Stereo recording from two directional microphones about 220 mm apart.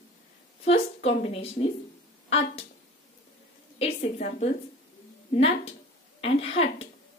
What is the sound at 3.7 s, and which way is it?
A woman's voice, 30° left (ahead or behind).